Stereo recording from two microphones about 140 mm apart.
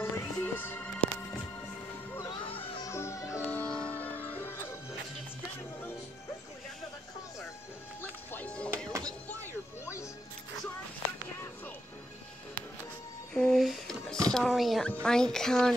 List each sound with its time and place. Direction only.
0.0 s music: 20° left (ahead or behind)
2.1 s music: 30° left (ahead or behind)
2.8 s music: 20° left (ahead or behind)
3.4 s music: 10° left (ahead or behind)
5.6 s music: 15° left (ahead or behind)
8.0 s music: 15° left (ahead or behind)
13.3 s a sound: 5° left (ahead or behind)
14.9 s speech: 5° left (ahead or behind)